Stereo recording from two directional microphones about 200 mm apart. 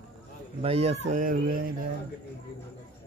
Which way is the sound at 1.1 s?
45° right (ahead or behind).